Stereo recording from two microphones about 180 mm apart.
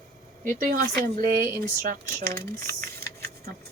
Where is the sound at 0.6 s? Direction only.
50° right (ahead or behind).